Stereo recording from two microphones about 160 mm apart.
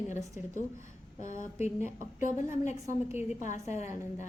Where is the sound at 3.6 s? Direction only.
15° right (ahead or behind).